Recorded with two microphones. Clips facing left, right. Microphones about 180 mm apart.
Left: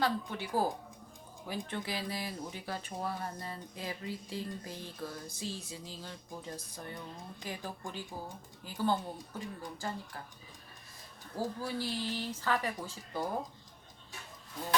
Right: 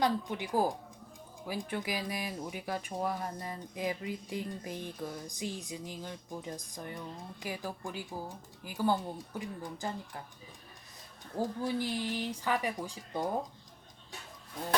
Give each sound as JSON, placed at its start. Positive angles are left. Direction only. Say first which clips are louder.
{"t": 0.0, "sound": "speech", "louder": "right 2 dB", "side_deg": -15}
{"t": 11.3, "sound": "speech", "louder": "right 3 dB", "side_deg": -20}